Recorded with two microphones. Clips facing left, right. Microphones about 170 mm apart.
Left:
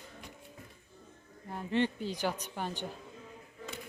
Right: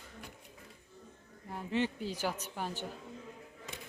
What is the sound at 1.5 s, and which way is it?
Speech, 5° right (ahead or behind).